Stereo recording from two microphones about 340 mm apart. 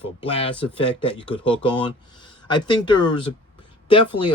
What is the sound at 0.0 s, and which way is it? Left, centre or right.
Speech, centre.